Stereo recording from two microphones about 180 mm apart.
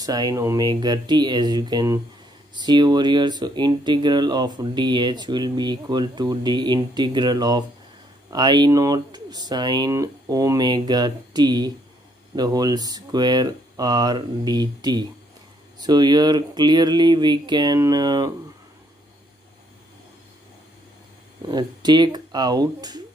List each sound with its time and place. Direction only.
0.0 s speech: 20° right (ahead or behind)
21.5 s speech: 25° right (ahead or behind)